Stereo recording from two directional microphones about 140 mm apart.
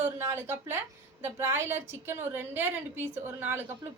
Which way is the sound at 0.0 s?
15° right (ahead or behind).